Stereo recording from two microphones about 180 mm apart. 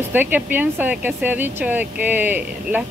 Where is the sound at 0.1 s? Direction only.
10° right (ahead or behind).